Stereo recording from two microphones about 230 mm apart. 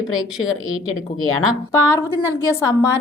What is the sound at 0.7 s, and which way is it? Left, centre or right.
Speech, left.